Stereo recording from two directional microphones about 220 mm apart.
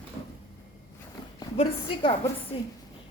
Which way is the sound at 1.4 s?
25° left (ahead or behind).